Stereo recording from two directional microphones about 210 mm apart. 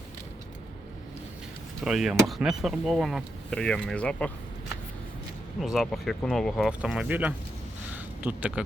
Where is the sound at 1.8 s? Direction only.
Centre (ahead or behind).